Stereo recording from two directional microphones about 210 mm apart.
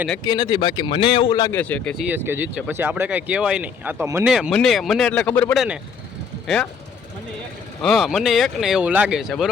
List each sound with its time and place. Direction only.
0.3 s speech: 20° left (ahead or behind)
1.6 s speech: 5° left (ahead or behind)
2.0 s speech: 10° right (ahead or behind); by 5.6 s 10° left (ahead or behind)
7.8 s speech: centre (ahead or behind)